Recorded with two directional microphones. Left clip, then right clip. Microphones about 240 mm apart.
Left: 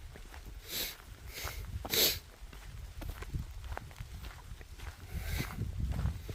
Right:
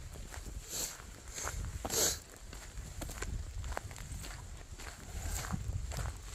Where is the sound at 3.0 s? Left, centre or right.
Right.